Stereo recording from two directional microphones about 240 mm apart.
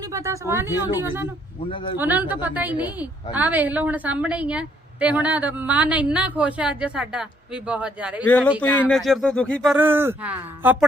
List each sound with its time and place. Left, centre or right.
0.1 s speech: centre
1.6 s speech: left
2.0 s a woman's voice: centre
9.7 s speech: centre